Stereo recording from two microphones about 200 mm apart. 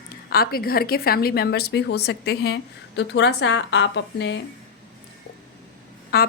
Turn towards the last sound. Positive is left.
turn(degrees=50)  # may be behind; listen again after turning